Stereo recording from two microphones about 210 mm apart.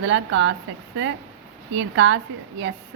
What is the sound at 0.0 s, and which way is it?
Speech, 60° right (ahead or behind).